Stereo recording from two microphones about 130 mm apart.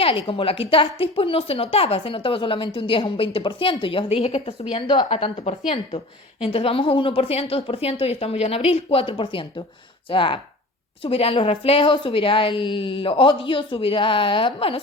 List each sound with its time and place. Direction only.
0.0 s a woman's voice: 45° left (ahead or behind)